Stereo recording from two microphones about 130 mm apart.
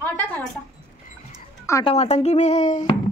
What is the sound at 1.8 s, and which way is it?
Speech, 50° left (ahead or behind).